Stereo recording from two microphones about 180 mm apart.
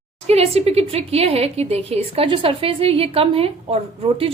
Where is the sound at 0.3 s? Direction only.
35° right (ahead or behind).